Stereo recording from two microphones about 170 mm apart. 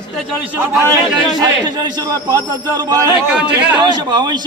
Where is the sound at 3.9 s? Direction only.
25° right (ahead or behind).